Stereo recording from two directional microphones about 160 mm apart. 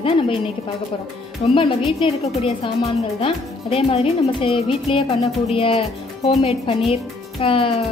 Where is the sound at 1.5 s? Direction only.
35° left (ahead or behind).